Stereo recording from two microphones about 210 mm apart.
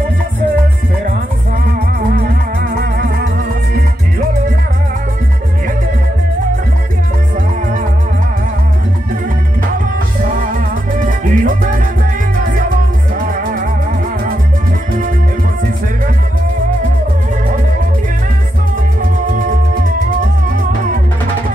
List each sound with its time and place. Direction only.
2.0 s music: 45° right (ahead or behind)
10.2 s music: 40° right (ahead or behind)